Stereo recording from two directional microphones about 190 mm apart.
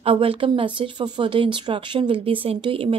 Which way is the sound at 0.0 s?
30° right (ahead or behind).